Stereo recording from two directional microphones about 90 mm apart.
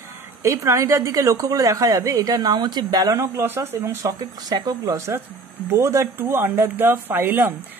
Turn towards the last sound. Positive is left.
turn(degrees=-25)  # may be behind; listen again after turning